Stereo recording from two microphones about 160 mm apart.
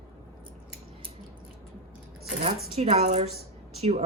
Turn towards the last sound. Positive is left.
turn(degrees=-40)  # may be behind; listen again after turning